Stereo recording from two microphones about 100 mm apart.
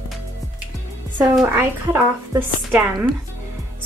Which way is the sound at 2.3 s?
20° right (ahead or behind).